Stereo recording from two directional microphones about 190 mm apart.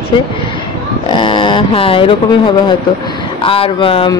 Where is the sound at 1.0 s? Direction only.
25° left (ahead or behind).